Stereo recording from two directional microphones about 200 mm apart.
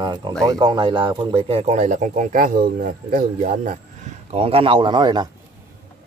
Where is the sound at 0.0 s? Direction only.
20° right (ahead or behind); by 3.7 s 45° right (ahead or behind).